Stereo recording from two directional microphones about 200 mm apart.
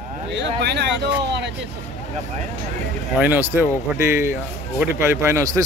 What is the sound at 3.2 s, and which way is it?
A man's voice, 10° right (ahead or behind).